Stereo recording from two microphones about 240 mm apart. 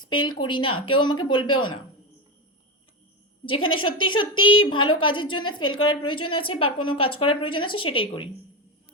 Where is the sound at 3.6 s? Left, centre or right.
Left.